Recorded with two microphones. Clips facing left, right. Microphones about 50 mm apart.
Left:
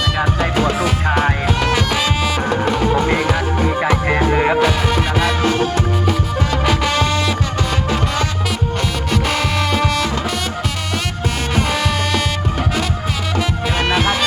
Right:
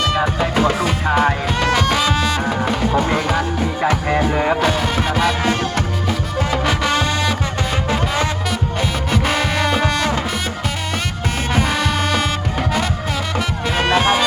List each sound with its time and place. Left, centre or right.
0.2 s music: centre
3.2 s music: centre
3.8 s music: centre
4.6 s music: centre
7.9 s music: right
9.2 s music: centre
14.0 s music: centre